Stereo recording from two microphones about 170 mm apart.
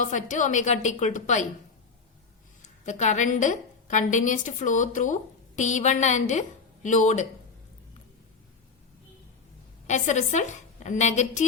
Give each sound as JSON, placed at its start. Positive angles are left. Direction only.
{"t": 0.0, "sound": "a woman's voice", "side_deg": 50}
{"t": 2.6, "sound": "a woman's voice", "side_deg": 45}
{"t": 9.8, "sound": "a woman's voice", "side_deg": 45}